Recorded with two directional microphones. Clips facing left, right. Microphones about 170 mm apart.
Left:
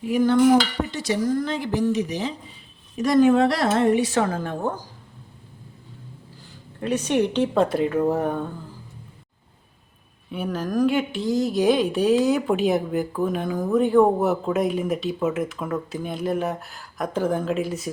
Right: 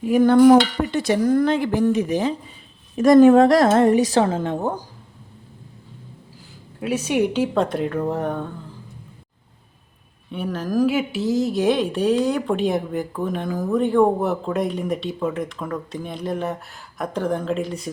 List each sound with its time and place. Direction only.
0.1 s dishes: 55° right (ahead or behind)
3.0 s a woman's voice: 50° right (ahead or behind)
4.2 s a woman's voice: 25° right (ahead or behind)
6.7 s speech: 5° right (ahead or behind)
10.3 s speech: centre (ahead or behind)